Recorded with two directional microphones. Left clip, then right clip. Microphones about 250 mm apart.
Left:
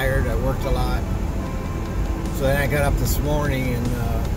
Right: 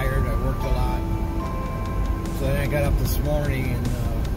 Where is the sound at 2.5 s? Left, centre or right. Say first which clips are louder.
Left 1 dB; centre.